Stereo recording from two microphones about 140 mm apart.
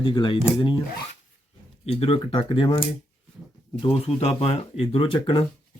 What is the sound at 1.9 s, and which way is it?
Speech, 45° left (ahead or behind).